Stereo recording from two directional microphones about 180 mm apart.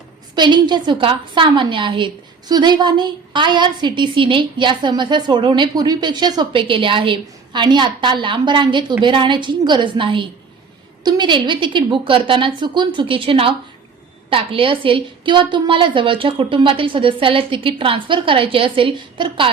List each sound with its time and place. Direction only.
0.3 s a woman's voice: 25° right (ahead or behind)